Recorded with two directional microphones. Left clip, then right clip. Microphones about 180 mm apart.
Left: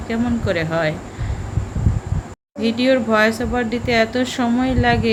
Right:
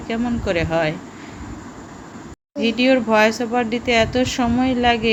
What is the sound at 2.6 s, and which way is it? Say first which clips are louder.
Speech: even; 15° right (ahead or behind).